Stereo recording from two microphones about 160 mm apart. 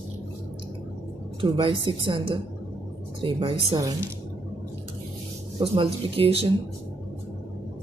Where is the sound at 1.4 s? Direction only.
35° right (ahead or behind).